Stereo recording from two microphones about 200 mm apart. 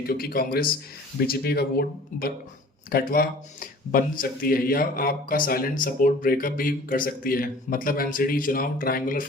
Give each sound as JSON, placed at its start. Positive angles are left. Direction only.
{"t": 0.0, "sound": "speech", "side_deg": 50}